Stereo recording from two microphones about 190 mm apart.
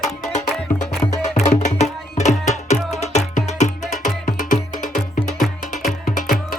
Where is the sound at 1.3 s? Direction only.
40° left (ahead or behind).